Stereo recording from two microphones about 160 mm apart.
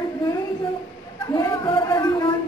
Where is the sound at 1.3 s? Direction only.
30° left (ahead or behind).